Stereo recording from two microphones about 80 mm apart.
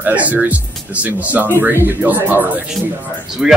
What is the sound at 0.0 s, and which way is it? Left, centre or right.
Speech, right.